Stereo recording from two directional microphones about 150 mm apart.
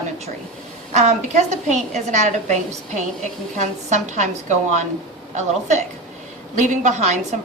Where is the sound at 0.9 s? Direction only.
50° right (ahead or behind).